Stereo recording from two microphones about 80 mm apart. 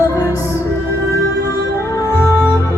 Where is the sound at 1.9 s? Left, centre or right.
Left.